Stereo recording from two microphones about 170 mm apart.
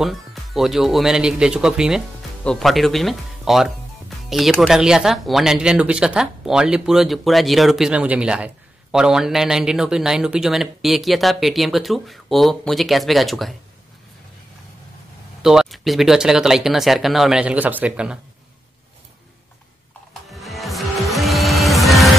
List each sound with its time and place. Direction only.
0.0 s speech: centre (ahead or behind)
15.4 s speech: 5° right (ahead or behind)
20.2 s music: centre (ahead or behind)